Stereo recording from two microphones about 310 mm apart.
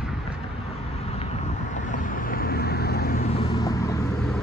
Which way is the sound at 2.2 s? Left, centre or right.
Left.